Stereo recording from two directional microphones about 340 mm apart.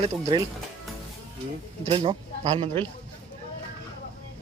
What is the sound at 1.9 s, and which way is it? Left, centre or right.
Speech, centre.